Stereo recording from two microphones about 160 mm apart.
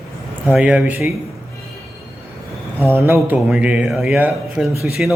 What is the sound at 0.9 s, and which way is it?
Speech, 20° right (ahead or behind).